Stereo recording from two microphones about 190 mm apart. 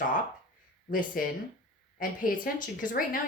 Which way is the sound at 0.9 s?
45° left (ahead or behind).